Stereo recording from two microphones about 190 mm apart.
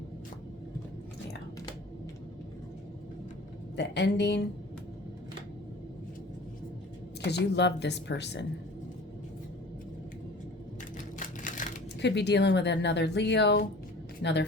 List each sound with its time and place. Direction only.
3.8 s speech: 65° left (ahead or behind)
7.3 s speech: 65° left (ahead or behind)
11.4 s a sound: 40° left (ahead or behind)
11.9 s speech: 65° left (ahead or behind)